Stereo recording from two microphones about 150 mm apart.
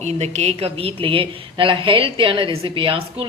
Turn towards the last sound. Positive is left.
turn(degrees=-40)  # may be behind; listen again after turning